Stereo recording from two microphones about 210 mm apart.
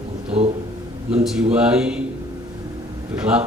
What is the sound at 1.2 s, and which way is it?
Speech, 5° right (ahead or behind).